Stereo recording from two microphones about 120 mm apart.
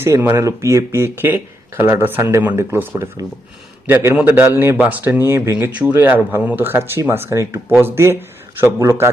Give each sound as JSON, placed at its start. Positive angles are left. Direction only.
{"t": 0.0, "sound": "speech", "side_deg": -20}
{"t": 3.2, "sound": "speech", "side_deg": -30}
{"t": 3.8, "sound": "speech", "side_deg": -20}